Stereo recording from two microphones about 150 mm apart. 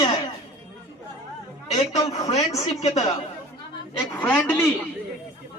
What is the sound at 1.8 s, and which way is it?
A woman's voice, 45° left (ahead or behind).